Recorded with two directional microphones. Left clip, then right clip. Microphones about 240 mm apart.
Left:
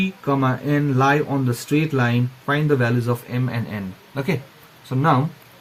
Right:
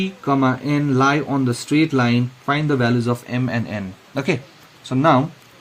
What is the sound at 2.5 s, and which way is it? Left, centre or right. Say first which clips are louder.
Speech: even; right.